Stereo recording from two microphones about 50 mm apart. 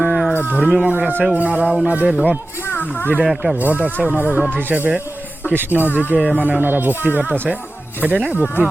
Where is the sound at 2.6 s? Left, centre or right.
Left.